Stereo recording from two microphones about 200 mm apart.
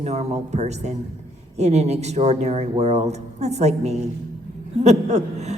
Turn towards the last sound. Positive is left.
turn(degrees=-35)  # may be behind; listen again after turning